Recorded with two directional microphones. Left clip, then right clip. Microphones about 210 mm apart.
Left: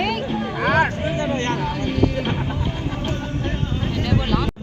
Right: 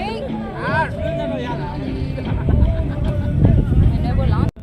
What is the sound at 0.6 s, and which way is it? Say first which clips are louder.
Hubbub: left 2 dB; 55° right (ahead or behind).